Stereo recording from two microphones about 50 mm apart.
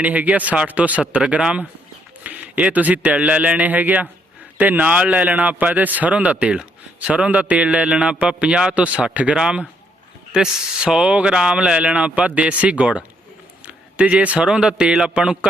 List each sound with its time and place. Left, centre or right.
0.0 s a man's voice: right
9.3 s a man's voice: centre
13.7 s a sound: right
14.4 s a man's voice: centre